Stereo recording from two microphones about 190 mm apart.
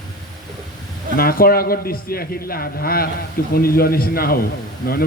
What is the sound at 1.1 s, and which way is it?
A man's voice, 50° left (ahead or behind).